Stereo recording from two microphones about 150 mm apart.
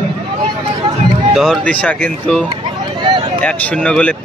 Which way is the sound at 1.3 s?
Centre (ahead or behind).